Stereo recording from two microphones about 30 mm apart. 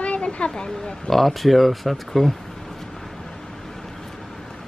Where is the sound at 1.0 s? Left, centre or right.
Centre.